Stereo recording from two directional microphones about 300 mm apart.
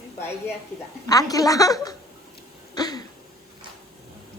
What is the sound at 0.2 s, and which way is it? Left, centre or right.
A woman's voice, centre.